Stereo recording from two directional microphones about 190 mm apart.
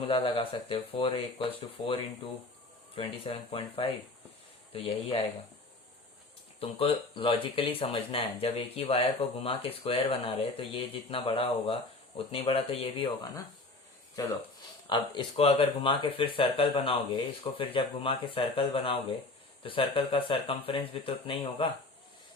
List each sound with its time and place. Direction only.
0.1 s speech: 25° left (ahead or behind)
6.6 s speech: 30° left (ahead or behind)
14.8 s speech: 25° left (ahead or behind)